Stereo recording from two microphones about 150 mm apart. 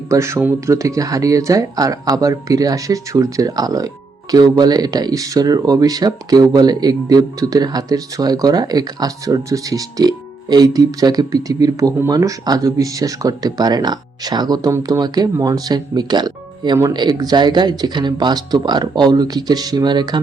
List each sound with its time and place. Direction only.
0.1 s speech: 20° right (ahead or behind)